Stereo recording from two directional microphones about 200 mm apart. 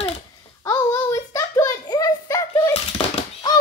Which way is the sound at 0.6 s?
15° left (ahead or behind).